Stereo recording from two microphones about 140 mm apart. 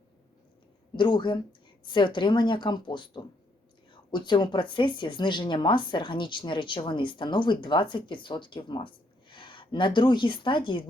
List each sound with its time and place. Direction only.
0.9 s speech: 35° left (ahead or behind)